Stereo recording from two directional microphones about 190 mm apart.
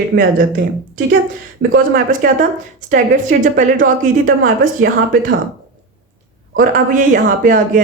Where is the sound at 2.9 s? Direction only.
45° right (ahead or behind).